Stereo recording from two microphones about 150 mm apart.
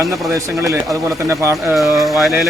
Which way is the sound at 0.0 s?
20° right (ahead or behind).